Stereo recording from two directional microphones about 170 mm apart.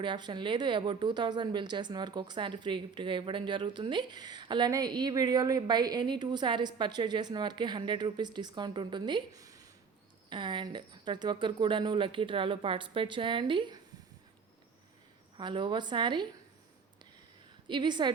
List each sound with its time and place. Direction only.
0.0 s a woman's voice: 30° right (ahead or behind)
15.4 s a woman's voice: 30° right (ahead or behind)
17.7 s a woman's voice: 25° right (ahead or behind)